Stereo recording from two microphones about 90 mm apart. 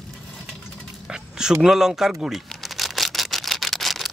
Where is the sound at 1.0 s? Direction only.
5° right (ahead or behind).